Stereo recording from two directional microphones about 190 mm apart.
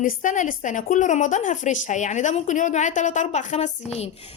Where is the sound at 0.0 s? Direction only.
45° left (ahead or behind).